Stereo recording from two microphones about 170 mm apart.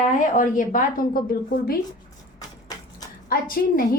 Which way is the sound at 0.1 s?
50° left (ahead or behind).